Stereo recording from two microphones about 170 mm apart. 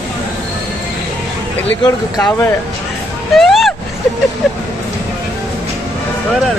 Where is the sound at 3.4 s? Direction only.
Centre (ahead or behind).